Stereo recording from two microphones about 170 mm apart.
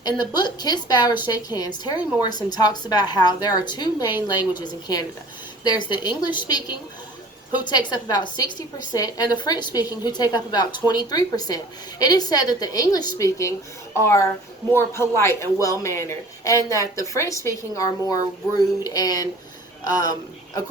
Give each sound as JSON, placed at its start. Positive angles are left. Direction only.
{"t": 0.0, "sound": "a woman's voice", "side_deg": 25}